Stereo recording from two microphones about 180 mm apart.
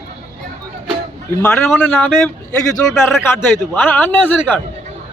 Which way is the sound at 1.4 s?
10° left (ahead or behind).